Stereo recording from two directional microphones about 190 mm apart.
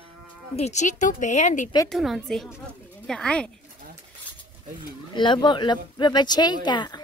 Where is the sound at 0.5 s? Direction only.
35° left (ahead or behind).